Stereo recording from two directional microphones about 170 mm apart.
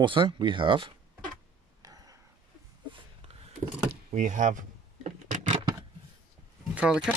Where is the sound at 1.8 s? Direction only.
20° right (ahead or behind).